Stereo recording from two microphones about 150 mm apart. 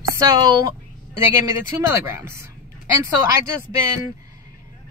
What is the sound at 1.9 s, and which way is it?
Speech, 20° right (ahead or behind).